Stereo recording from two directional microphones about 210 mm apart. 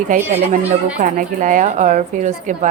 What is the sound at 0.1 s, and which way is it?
A woman's voice, 40° right (ahead or behind).